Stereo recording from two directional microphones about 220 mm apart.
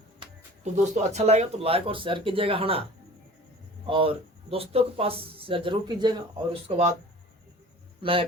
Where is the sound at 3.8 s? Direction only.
25° right (ahead or behind).